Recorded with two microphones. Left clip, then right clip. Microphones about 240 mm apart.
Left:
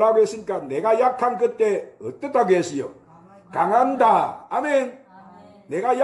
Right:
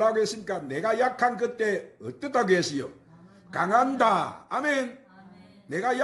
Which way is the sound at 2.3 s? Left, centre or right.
Right.